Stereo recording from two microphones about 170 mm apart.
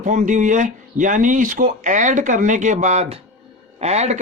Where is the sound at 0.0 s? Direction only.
45° right (ahead or behind).